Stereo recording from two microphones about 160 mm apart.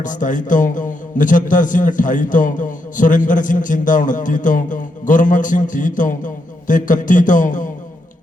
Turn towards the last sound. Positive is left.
turn(degrees=55)  # may be behind; listen again after turning